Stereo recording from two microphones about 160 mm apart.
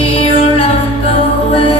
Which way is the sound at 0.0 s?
35° left (ahead or behind).